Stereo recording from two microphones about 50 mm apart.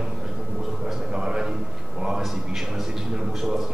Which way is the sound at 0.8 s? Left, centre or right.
Centre.